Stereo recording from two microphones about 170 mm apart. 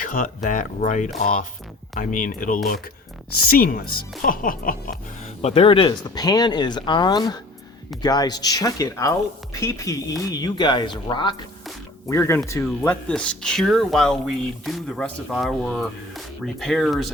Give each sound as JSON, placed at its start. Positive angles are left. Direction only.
{"t": 0.0, "sound": "speech", "side_deg": 55}
{"t": 5.4, "sound": "speech", "side_deg": 35}
{"t": 12.0, "sound": "speech", "side_deg": 15}